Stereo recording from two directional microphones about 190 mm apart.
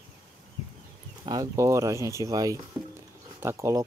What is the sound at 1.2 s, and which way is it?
Speech, 20° right (ahead or behind).